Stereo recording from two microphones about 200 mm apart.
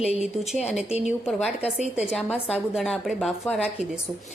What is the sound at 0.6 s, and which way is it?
A woman's voice, 5° right (ahead or behind).